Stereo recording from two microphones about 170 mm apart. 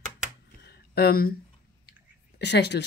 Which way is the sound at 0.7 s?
70° left (ahead or behind).